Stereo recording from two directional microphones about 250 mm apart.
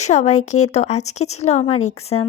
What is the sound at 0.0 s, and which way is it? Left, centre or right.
A woman's voice, left.